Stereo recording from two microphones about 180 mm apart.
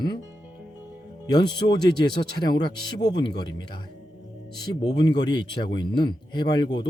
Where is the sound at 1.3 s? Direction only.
25° left (ahead or behind).